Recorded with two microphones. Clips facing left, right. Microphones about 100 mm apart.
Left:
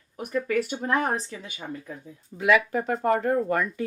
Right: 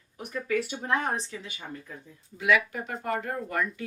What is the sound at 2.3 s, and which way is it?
Speech, 40° left (ahead or behind).